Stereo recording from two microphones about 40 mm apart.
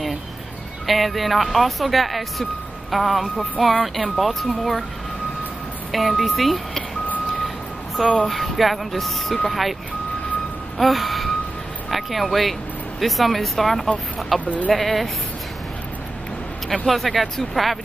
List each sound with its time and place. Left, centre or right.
0.8 s speech: centre
5.9 s speech: centre
10.8 s a sound: centre
11.9 s speech: centre
14.4 s speech: left
14.7 s speech: centre
16.6 s speech: centre